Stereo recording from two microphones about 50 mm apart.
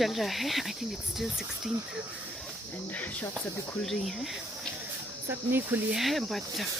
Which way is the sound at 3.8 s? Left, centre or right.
Centre.